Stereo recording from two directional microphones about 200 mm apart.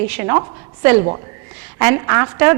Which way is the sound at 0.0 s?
10° right (ahead or behind).